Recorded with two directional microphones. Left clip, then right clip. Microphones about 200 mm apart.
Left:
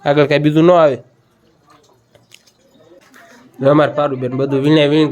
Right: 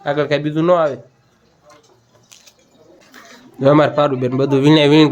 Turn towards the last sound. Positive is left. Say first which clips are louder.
# right 1 dB
turn(degrees=-15)  # may be behind; listen again after turning